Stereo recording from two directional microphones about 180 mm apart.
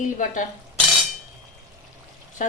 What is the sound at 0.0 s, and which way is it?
Speech, 45° left (ahead or behind).